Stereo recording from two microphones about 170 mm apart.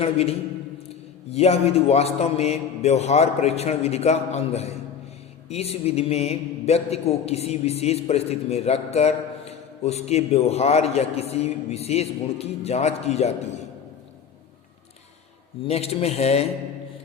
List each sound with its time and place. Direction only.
0.0 s a man's voice: 35° left (ahead or behind)
15.6 s a man's voice: 35° left (ahead or behind)